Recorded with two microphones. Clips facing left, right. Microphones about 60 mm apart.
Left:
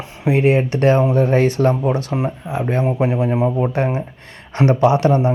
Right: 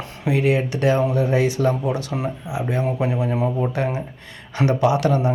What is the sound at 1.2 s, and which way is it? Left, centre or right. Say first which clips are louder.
Speech: left 4 dB; left.